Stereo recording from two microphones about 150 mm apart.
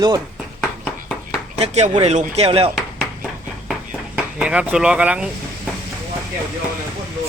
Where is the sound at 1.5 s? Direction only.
45° right (ahead or behind).